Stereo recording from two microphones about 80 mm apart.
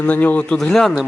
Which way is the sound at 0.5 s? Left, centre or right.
Centre.